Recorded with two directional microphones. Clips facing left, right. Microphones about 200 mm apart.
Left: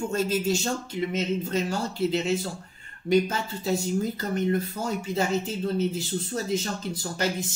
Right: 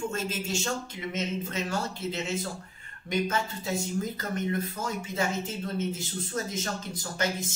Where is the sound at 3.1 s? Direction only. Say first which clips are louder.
Left 6 dB; 35° left (ahead or behind).